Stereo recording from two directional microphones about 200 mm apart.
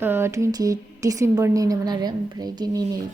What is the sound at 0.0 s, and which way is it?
A woman's voice, 10° right (ahead or behind).